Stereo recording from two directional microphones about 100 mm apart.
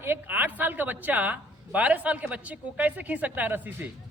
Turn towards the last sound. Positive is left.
turn(degrees=-15)  # may be behind; listen again after turning